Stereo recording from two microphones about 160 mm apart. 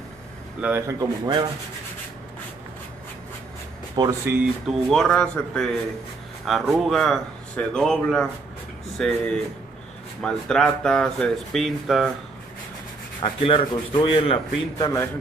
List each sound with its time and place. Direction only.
0.6 s speech: 10° right (ahead or behind)
4.0 s speech: 30° right (ahead or behind)
4.6 s speech: centre (ahead or behind)
13.2 s rub: 35° left (ahead or behind)